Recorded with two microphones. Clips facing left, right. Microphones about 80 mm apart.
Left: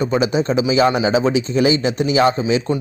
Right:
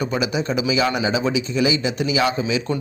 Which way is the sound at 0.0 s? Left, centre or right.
Left.